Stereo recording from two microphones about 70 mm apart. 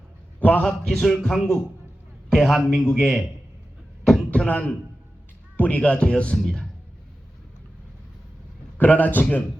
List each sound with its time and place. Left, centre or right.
0.3 s a sound: left
0.6 s a man's voice: centre
4.4 s a man's voice: left
6.3 s a man's voice: centre
8.8 s a man's voice: left